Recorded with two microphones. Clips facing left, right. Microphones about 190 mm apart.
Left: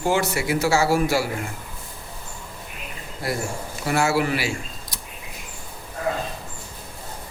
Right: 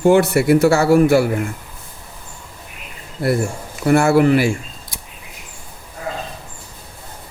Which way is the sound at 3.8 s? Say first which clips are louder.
Right 9 dB; 55° right (ahead or behind).